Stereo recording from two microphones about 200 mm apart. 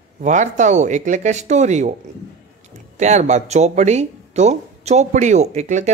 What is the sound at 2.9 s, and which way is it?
Speech, 35° right (ahead or behind).